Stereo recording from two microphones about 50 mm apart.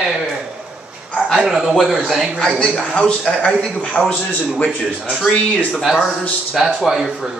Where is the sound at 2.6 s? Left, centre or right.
Left.